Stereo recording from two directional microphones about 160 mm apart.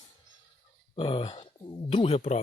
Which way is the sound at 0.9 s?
30° left (ahead or behind).